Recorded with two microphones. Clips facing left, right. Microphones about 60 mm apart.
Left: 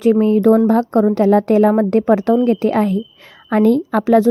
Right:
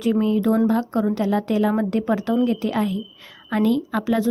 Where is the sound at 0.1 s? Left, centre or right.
Left.